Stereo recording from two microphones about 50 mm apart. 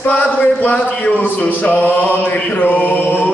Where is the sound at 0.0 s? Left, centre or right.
Left.